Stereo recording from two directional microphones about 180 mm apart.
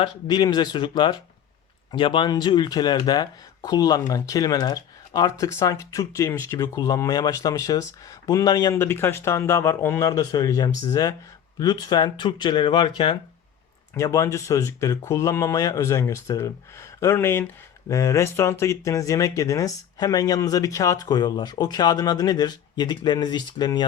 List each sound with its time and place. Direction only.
0.0 s speech: 25° left (ahead or behind)